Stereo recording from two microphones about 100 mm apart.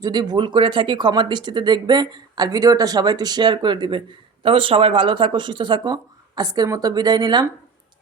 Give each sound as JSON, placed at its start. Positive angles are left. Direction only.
{"t": 0.0, "sound": "speech", "side_deg": -45}